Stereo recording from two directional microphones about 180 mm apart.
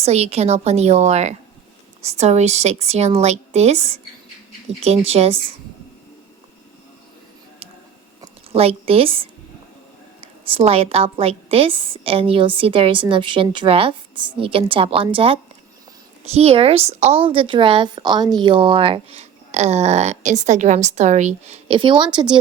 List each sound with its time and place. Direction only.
0.0 s a woman's voice: 35° right (ahead or behind)
8.5 s a woman's voice: 35° right (ahead or behind)